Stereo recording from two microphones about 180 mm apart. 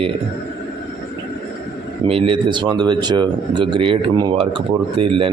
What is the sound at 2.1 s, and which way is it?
Speech, 30° right (ahead or behind).